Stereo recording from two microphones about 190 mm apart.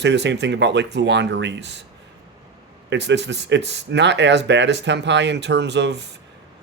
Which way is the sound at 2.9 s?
65° right (ahead or behind).